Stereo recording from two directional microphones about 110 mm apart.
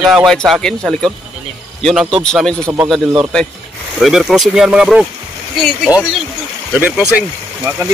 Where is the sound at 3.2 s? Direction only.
5° left (ahead or behind).